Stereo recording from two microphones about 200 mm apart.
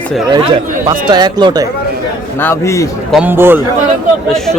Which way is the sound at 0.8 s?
20° right (ahead or behind).